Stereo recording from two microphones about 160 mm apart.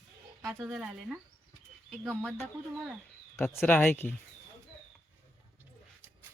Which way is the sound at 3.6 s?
10° left (ahead or behind).